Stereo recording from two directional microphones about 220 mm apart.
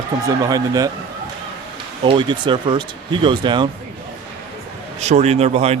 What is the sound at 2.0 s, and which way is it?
Speech, 20° right (ahead or behind).